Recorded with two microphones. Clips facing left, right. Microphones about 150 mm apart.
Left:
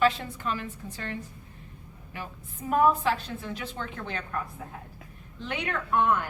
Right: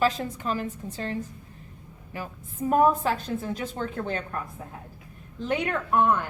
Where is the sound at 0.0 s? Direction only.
40° right (ahead or behind).